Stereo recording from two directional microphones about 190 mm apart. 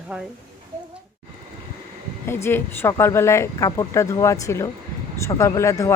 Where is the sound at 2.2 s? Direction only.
10° left (ahead or behind).